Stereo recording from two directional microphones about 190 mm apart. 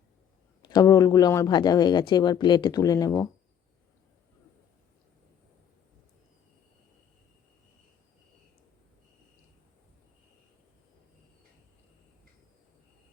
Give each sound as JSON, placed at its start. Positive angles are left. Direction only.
{"t": 0.6, "sound": "speech", "side_deg": 20}